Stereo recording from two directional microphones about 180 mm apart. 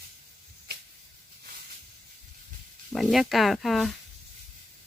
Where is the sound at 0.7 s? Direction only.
60° right (ahead or behind).